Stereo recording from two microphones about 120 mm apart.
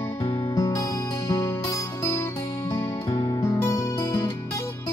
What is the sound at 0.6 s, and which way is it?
Music, 30° left (ahead or behind).